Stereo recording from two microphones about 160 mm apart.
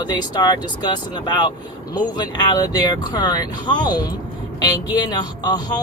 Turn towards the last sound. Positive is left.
turn(degrees=25)  # may be behind; listen again after turning